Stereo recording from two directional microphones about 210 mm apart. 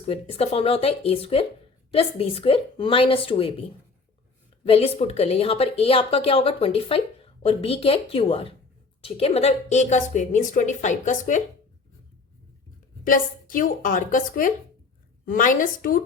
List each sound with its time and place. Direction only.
0.0 s speech: 30° left (ahead or behind)
4.6 s a woman's voice: 30° left (ahead or behind)
13.1 s a woman's voice: 40° left (ahead or behind)